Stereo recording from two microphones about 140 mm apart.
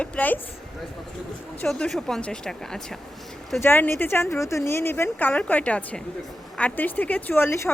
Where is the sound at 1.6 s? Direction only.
5° left (ahead or behind).